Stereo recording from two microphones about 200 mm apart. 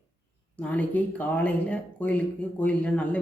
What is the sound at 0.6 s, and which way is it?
Speech, 5° left (ahead or behind).